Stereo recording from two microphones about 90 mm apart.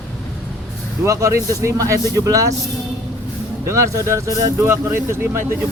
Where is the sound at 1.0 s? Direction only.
35° right (ahead or behind).